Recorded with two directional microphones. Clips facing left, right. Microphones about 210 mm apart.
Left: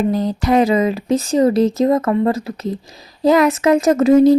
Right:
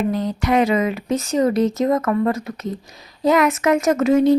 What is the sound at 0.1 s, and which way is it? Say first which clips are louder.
Speech: left 3 dB; 35° left (ahead or behind).